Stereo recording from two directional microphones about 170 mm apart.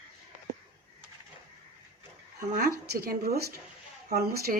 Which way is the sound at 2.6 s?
65° right (ahead or behind).